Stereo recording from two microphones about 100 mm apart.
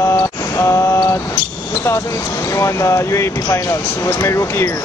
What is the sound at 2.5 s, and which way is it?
Speech, 30° left (ahead or behind).